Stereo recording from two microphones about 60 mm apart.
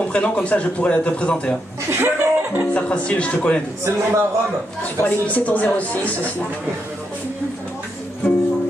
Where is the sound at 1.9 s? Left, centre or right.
Right.